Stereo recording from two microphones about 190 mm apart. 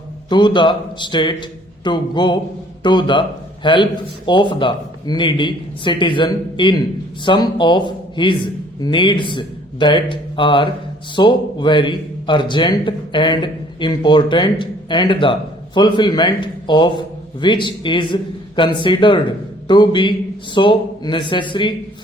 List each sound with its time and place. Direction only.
0.3 s a man's voice: 25° left (ahead or behind)